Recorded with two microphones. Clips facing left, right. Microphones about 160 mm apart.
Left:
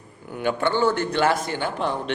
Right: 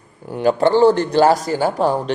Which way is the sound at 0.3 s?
35° right (ahead or behind).